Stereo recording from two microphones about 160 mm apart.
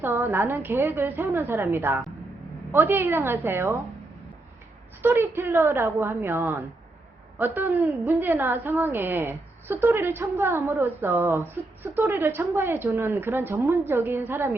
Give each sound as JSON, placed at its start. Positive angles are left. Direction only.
{"t": 0.0, "sound": "a woman's voice", "side_deg": -15}
{"t": 5.0, "sound": "a woman's voice", "side_deg": -15}